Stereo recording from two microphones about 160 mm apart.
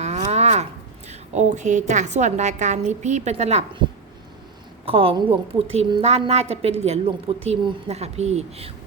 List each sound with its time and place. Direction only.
0.0 s speech: 45° right (ahead or behind)
4.9 s a woman's voice: 35° right (ahead or behind)